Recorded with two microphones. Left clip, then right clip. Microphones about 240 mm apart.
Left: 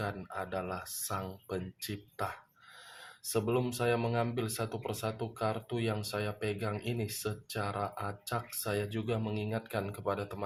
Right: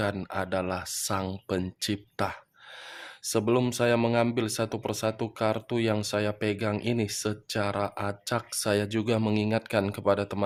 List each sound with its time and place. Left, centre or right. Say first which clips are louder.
0.0 s speech: right 8 dB; right